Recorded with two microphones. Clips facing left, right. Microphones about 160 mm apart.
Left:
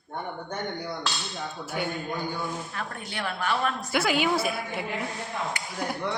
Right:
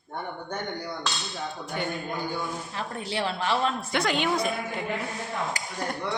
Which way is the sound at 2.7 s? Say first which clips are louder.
Right 4 dB; 30° right (ahead or behind).